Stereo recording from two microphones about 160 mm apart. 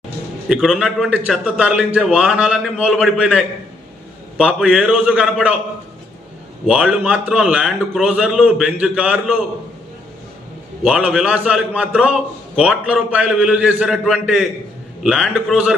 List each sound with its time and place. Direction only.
0.4 s a man's voice: 5° right (ahead or behind)
6.7 s a man's voice: 5° right (ahead or behind)
10.8 s a man's voice: 5° right (ahead or behind)